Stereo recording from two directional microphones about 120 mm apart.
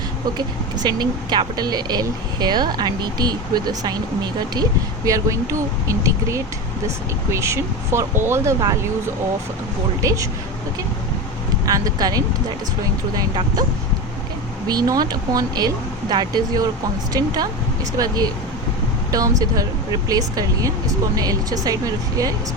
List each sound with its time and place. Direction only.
0.3 s speech: 35° right (ahead or behind)
10.0 s speech: 25° right (ahead or behind)
11.7 s speech: 30° right (ahead or behind)
14.7 s speech: 35° right (ahead or behind)
19.4 s speech: 30° right (ahead or behind)